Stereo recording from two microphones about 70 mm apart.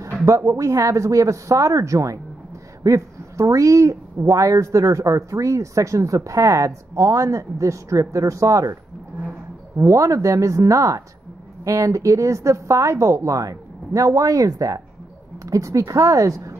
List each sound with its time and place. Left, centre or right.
0.5 s speech: right
9.8 s speech: right